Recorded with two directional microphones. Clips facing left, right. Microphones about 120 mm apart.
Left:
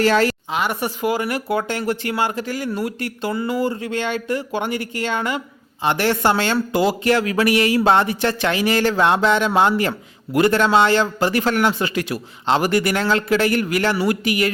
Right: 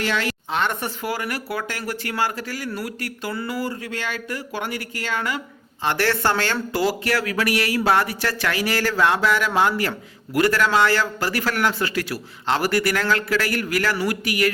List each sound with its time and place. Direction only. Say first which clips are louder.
0.0 s a woman's voice: left 8 dB; 40° left (ahead or behind)
0.5 s speech: left 2 dB; 10° left (ahead or behind)